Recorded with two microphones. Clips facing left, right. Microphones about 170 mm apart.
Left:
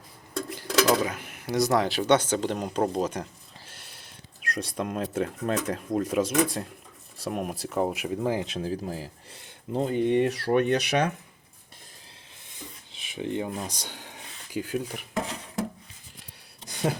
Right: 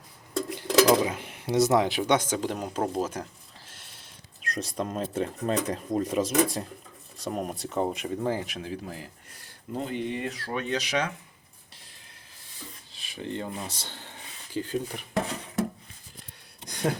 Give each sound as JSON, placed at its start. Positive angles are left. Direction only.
{"t": 0.3, "sound": "speech", "side_deg": -20}
{"t": 8.4, "sound": "speech", "side_deg": 35}
{"t": 10.1, "sound": "speech", "side_deg": 70}
{"t": 13.0, "sound": "speech", "side_deg": 20}
{"t": 16.6, "sound": "a sound", "side_deg": 5}